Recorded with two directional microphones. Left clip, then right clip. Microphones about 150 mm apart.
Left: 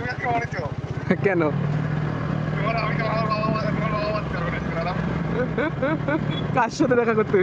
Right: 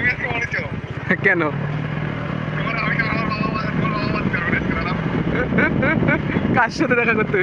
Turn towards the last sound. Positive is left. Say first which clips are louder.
# right 2 dB
turn(degrees=20)  # may be behind; listen again after turning